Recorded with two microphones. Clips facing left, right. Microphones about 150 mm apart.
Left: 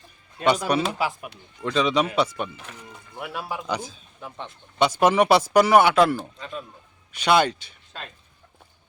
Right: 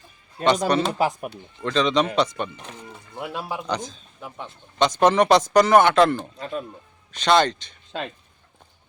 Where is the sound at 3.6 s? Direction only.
10° left (ahead or behind).